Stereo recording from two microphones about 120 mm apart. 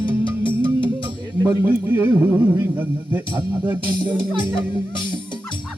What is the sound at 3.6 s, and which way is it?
Music, 40° right (ahead or behind).